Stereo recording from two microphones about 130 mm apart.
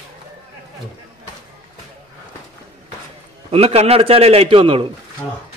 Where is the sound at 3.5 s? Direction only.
50° right (ahead or behind).